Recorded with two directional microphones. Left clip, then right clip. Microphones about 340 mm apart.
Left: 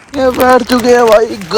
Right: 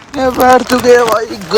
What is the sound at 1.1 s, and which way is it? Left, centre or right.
Speech, centre.